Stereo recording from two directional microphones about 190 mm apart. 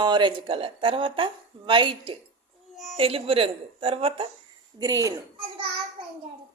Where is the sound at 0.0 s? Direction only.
25° right (ahead or behind).